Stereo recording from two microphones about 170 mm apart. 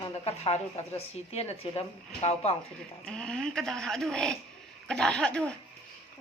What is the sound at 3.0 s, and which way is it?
Speech, 5° left (ahead or behind).